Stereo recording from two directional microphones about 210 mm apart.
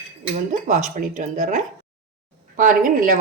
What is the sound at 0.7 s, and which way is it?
Speech, 35° right (ahead or behind).